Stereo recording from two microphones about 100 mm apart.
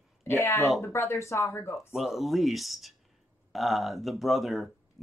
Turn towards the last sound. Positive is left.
turn(degrees=0)  # may be behind; listen again after turning